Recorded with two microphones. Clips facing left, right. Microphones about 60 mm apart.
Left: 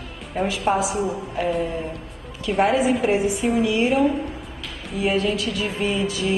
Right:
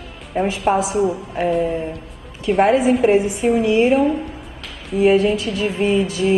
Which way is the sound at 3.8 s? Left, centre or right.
Centre.